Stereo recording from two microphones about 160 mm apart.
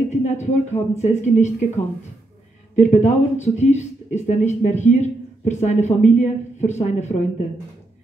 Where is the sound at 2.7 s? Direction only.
50° left (ahead or behind).